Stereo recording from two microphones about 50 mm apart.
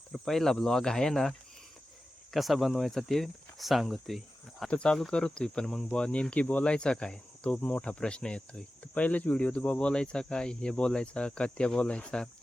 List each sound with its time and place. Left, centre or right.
0.1 s speech: centre
4.7 s cricket: centre
5.1 s speech: centre
6.3 s cricket: left